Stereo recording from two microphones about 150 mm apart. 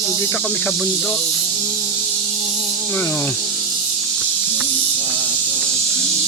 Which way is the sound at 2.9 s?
10° left (ahead or behind).